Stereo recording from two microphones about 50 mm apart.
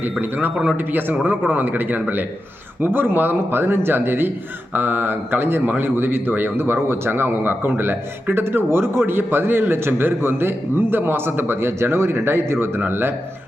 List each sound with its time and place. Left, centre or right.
0.0 s speech: right
6.8 s speech: right